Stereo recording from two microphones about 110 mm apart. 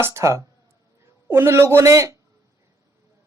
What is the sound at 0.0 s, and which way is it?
Speech, 25° right (ahead or behind).